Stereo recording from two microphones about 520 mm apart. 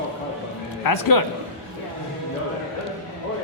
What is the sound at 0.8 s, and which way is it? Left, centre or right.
Speech, left.